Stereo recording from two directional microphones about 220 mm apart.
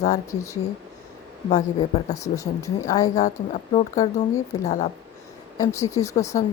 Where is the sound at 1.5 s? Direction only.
30° left (ahead or behind).